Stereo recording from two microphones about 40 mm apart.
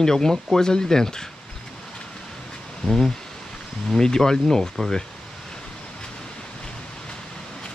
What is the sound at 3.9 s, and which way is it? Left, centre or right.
Speech, centre.